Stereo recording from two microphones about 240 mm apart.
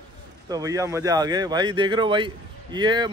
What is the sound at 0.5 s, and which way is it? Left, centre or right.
Speech, centre.